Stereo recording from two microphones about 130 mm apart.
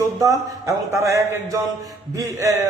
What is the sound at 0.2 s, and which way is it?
A man's voice, 25° right (ahead or behind).